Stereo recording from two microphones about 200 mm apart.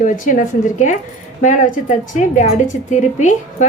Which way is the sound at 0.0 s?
40° left (ahead or behind).